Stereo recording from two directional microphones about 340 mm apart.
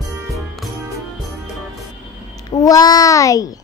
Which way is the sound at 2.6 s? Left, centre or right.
Centre.